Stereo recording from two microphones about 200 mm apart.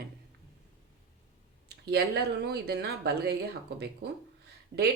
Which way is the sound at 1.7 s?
55° right (ahead or behind).